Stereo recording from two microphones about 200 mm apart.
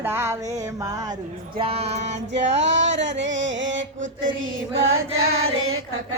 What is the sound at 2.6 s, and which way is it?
Music, 60° right (ahead or behind).